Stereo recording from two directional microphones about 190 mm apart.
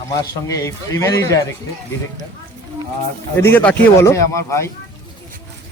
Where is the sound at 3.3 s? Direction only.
10° left (ahead or behind).